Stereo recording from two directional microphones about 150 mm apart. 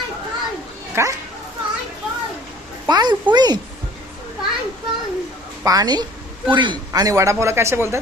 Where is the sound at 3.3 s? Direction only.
30° right (ahead or behind).